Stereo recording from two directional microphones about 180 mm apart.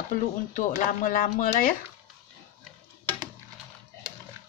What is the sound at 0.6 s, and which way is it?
Speech, 45° left (ahead or behind).